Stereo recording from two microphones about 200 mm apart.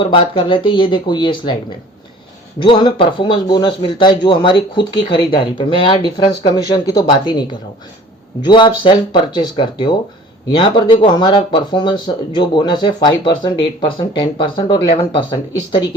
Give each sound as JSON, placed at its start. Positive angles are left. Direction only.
{"t": 0.0, "sound": "speech", "side_deg": 25}
{"t": 2.6, "sound": "speech", "side_deg": 25}
{"t": 8.4, "sound": "speech", "side_deg": 20}